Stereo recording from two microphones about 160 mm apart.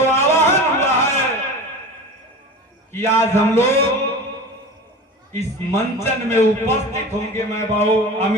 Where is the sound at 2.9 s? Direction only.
15° left (ahead or behind).